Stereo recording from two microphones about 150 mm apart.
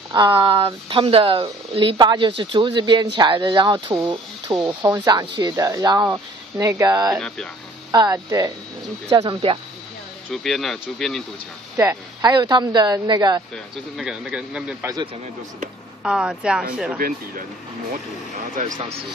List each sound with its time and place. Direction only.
0.1 s a woman's voice: 30° right (ahead or behind)
7.2 s a man's voice: 5° left (ahead or behind)
7.9 s a woman's voice: 25° right (ahead or behind)
10.3 s a man's voice: centre (ahead or behind)
11.7 s speech: 20° right (ahead or behind)
13.9 s a man's voice: centre (ahead or behind)
16.0 s a man's voice: 5° right (ahead or behind)